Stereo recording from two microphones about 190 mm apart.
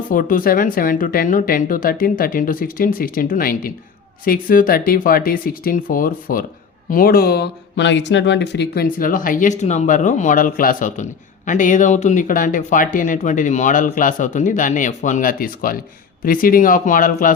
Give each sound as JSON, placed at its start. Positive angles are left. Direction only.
{"t": 0.1, "sound": "speech", "side_deg": 45}